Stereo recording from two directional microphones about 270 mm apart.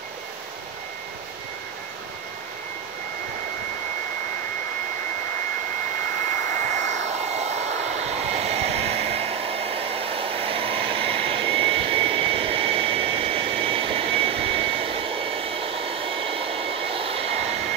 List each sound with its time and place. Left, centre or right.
6.5 s vehicle: right